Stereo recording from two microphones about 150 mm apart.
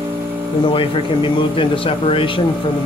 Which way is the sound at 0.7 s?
35° left (ahead or behind).